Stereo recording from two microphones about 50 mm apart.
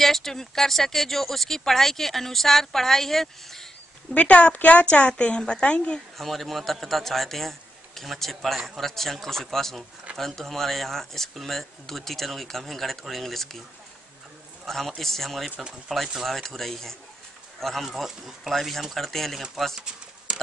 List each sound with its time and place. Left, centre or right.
0.0 s speech: centre
4.1 s a woman's voice: left
6.1 s speech: centre
14.7 s speech: centre